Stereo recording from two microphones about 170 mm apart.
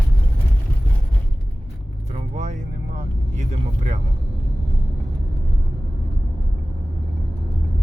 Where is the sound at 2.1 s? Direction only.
45° right (ahead or behind).